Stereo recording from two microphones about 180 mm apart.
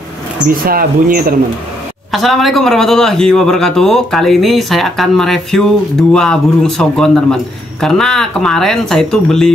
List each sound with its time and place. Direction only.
0.5 s speech: 55° right (ahead or behind)
2.1 s a man's voice: centre (ahead or behind)